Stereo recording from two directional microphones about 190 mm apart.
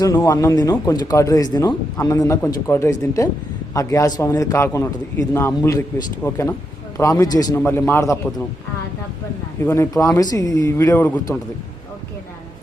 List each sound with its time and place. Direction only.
0.2 s a man's voice: 15° left (ahead or behind)
9.6 s a man's voice: 15° left (ahead or behind)